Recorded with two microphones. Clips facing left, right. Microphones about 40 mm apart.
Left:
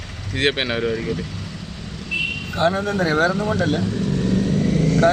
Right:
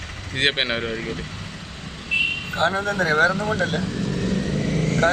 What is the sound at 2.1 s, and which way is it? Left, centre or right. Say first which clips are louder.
Vehicle: right 2 dB; right.